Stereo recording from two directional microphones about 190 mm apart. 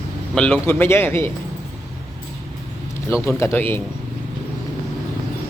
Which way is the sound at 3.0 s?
15° left (ahead or behind).